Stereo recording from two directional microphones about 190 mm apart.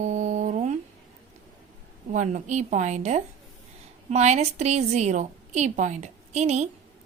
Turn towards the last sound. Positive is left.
turn(degrees=-35)  # may be behind; listen again after turning